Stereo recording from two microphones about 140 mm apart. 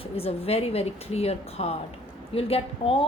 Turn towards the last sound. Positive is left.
turn(degrees=40)  # may be behind; listen again after turning